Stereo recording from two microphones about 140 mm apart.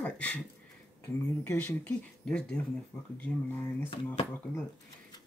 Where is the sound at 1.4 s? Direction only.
20° left (ahead or behind).